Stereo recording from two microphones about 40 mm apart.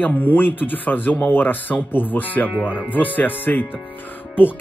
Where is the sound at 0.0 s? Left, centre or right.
Left.